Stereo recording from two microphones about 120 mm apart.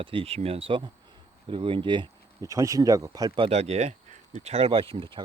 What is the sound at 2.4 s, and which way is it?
Speech, 25° right (ahead or behind).